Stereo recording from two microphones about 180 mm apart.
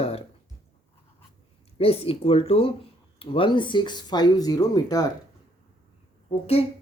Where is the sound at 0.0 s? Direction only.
35° left (ahead or behind).